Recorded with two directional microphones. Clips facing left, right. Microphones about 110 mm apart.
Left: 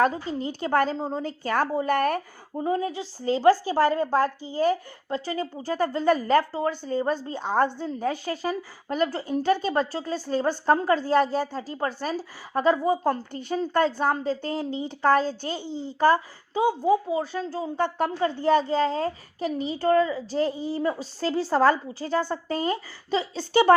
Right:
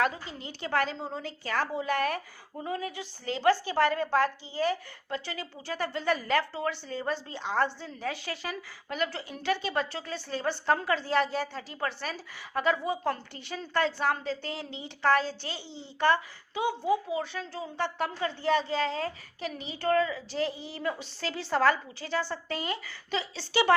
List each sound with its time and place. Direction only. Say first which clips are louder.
0.0 s a woman's voice: left 6 dB; 35° left (ahead or behind)
2.6 s a woman's voice: left 8 dB; 30° left (ahead or behind)
5.0 s a woman's voice: left 7 dB; 35° left (ahead or behind)